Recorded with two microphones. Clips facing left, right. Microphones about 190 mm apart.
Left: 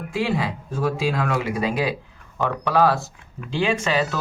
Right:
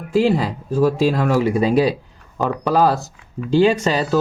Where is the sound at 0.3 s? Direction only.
35° right (ahead or behind).